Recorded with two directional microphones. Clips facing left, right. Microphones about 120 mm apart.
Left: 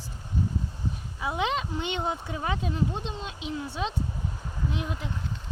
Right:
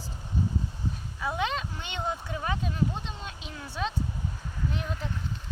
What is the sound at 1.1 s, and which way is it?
Speech, 20° left (ahead or behind).